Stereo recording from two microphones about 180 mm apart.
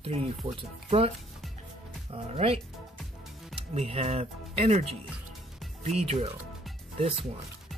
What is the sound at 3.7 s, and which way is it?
Speech, 35° right (ahead or behind).